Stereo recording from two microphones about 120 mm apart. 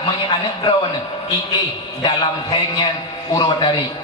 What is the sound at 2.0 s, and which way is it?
A man's voice, 35° left (ahead or behind).